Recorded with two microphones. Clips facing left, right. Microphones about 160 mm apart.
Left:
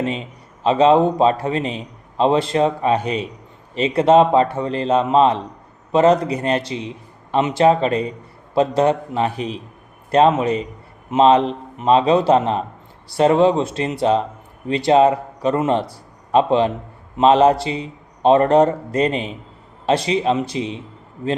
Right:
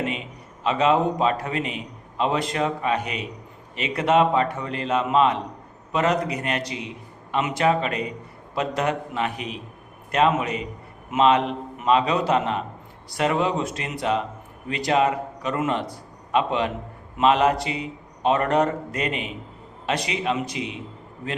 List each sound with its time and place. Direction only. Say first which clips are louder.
0.0 s a man's voice: left 5 dB; 30° left (ahead or behind)